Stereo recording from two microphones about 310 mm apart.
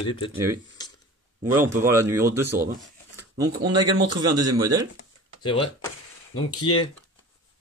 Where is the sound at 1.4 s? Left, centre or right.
Centre.